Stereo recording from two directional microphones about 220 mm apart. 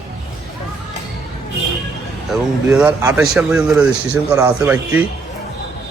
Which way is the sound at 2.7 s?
10° right (ahead or behind).